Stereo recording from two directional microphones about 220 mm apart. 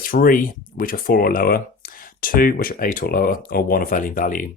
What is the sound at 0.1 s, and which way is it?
Speech, 40° left (ahead or behind).